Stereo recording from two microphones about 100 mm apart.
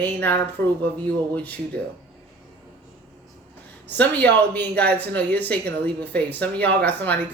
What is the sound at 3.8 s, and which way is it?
Speech, 15° left (ahead or behind).